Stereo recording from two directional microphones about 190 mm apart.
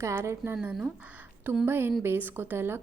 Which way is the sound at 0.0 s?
15° right (ahead or behind).